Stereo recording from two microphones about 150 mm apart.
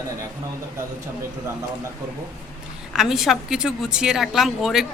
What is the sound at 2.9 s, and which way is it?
A woman's voice, 5° right (ahead or behind).